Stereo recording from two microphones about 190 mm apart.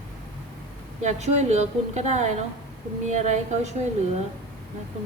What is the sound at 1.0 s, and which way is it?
A woman's voice, 35° right (ahead or behind).